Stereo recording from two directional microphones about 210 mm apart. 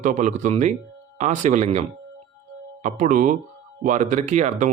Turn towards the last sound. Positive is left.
turn(degrees=-35)  # may be behind; listen again after turning